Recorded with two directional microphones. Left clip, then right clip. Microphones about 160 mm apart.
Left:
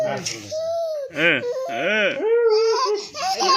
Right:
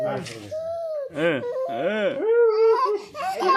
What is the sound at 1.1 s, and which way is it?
Speech, 15° right (ahead or behind).